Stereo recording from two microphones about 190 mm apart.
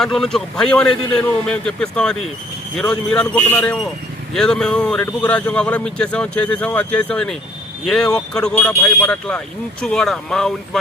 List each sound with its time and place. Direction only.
0.0 s a man's voice: centre (ahead or behind)